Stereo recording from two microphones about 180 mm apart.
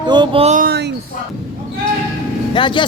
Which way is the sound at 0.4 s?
45° right (ahead or behind).